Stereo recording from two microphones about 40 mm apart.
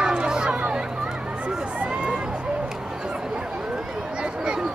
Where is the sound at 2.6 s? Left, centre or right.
Centre.